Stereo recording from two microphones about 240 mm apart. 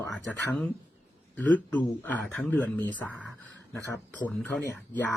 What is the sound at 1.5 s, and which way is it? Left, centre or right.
Speech, centre.